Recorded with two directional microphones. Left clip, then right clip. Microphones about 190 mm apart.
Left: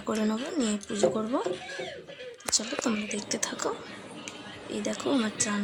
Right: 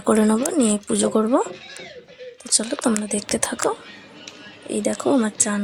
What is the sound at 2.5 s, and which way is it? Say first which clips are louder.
Speech: right 7 dB; 45° right (ahead or behind).